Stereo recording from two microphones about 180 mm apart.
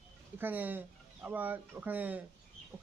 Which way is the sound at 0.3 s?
10° right (ahead or behind).